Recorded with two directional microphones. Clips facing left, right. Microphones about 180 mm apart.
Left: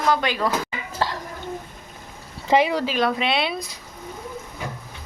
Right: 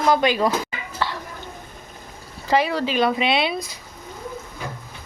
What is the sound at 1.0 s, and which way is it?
Dishes, 35° left (ahead or behind).